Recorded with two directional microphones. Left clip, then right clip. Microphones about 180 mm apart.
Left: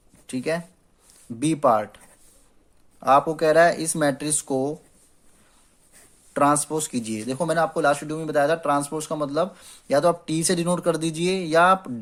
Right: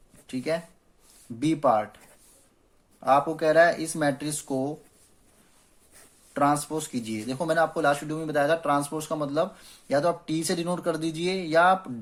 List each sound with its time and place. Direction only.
0.3 s speech: 40° left (ahead or behind)
3.0 s speech: 40° left (ahead or behind)
6.3 s speech: 40° left (ahead or behind)